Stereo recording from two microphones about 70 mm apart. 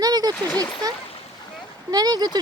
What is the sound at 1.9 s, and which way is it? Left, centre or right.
Speech, right.